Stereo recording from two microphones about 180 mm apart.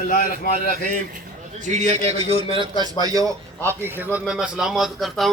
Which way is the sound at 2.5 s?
25° right (ahead or behind).